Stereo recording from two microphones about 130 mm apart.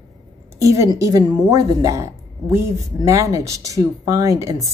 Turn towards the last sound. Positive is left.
turn(degrees=-25)  # may be behind; listen again after turning